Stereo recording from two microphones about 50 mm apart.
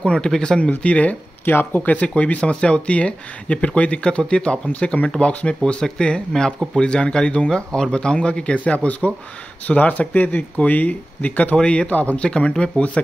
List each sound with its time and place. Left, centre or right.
0.0 s speech: centre
1.4 s speech: left
5.6 s speech: centre